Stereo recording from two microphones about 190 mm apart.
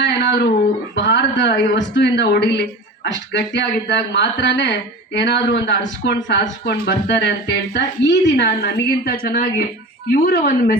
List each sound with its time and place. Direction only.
0.0 s a sound: 65° left (ahead or behind)
0.9 s a man's voice: 70° left (ahead or behind)
8.4 s a woman's voice: 55° left (ahead or behind)